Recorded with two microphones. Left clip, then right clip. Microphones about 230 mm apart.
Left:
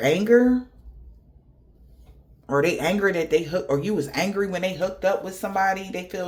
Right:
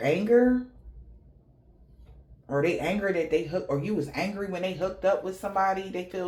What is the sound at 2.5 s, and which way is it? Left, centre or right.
Speech, left.